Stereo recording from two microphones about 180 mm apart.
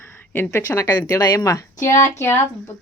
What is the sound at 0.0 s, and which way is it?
A woman's voice, 10° left (ahead or behind).